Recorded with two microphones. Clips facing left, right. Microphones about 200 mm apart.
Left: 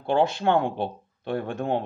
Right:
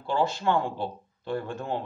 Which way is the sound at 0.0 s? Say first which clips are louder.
Left 4 dB; 60° left (ahead or behind).